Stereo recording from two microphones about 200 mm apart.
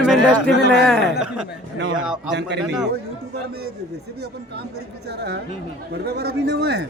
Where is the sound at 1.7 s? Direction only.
80° right.